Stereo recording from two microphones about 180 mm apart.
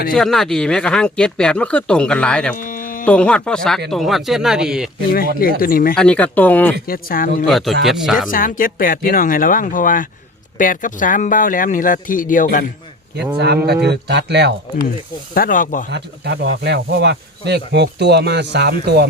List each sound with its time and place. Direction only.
0.1 s speech: centre (ahead or behind)
2.6 s a sound: 50° left (ahead or behind)
3.1 s speech: 5° left (ahead or behind)
5.4 s speech: 55° left (ahead or behind)
6.0 s speech: 5° left (ahead or behind)
6.8 s speech: 55° left (ahead or behind)
7.4 s speech: centre (ahead or behind)
8.3 s speech: 50° left (ahead or behind)
13.8 s speech: 70° right (ahead or behind)
15.4 s speech: 50° left (ahead or behind)
15.9 s speech: 70° right (ahead or behind)